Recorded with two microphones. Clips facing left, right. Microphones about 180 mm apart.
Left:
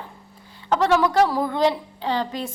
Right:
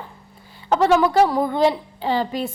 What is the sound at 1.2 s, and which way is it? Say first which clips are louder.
Speech: right 3 dB; 20° right (ahead or behind).